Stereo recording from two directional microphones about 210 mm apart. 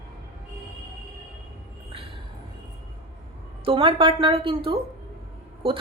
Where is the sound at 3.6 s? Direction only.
25° right (ahead or behind).